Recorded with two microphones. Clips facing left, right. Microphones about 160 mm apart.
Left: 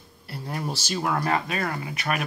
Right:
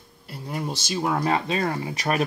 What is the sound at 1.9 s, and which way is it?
Speech, 35° right (ahead or behind).